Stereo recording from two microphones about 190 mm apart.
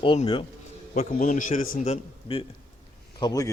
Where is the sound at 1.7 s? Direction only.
30° left (ahead or behind).